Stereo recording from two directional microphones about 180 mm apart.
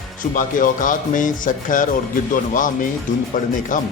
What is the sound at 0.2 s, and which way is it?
Speech, 45° left (ahead or behind).